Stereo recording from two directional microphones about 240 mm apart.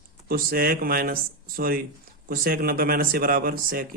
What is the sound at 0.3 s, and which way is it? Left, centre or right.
Speech, right.